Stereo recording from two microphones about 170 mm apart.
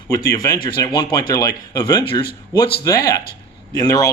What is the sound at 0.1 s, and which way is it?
Speech, 20° left (ahead or behind).